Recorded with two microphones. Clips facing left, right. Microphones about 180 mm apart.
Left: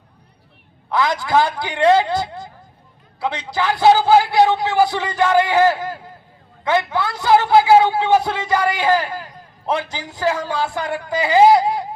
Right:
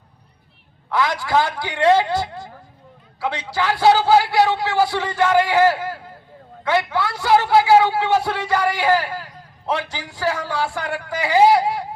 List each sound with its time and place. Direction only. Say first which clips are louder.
0.9 s a man's voice: left 2 dB; 20° left (ahead or behind)